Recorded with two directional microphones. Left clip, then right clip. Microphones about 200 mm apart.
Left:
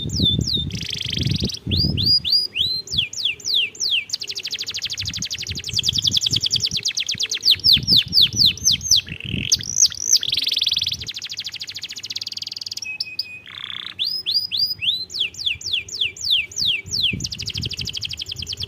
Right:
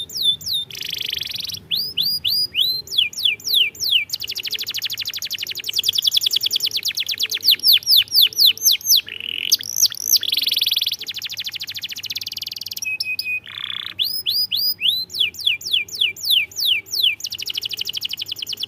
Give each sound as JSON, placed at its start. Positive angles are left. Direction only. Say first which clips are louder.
{"t": 0.2, "sound": "bird", "louder": "right 1 dB", "side_deg": -20}
{"t": 14.0, "sound": "bird", "louder": "right 1 dB", "side_deg": -25}